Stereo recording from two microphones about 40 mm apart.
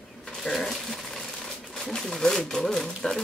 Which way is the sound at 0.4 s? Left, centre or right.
Centre.